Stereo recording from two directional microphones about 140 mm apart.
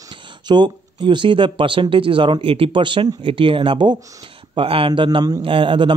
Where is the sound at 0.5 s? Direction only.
35° right (ahead or behind).